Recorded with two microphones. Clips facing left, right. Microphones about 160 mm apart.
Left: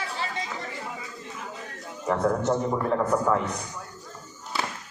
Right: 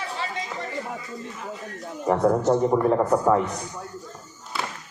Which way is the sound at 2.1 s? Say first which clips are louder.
Right 4 dB; 30° right (ahead or behind).